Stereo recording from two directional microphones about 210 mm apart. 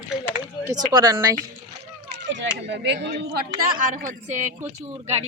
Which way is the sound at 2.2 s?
55° right (ahead or behind).